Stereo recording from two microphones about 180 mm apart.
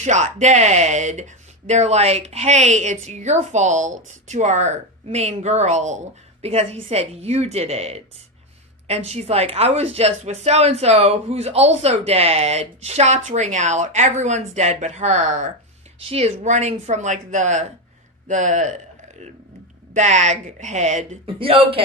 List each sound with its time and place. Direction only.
0.0 s speech: 40° right (ahead or behind)
19.9 s speech: 40° right (ahead or behind)